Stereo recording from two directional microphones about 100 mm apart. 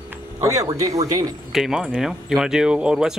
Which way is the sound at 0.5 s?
35° right (ahead or behind).